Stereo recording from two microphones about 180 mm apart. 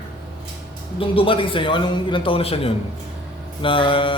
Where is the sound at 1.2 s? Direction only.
30° left (ahead or behind).